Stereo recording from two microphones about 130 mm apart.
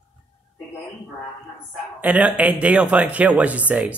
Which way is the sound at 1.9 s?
10° right (ahead or behind).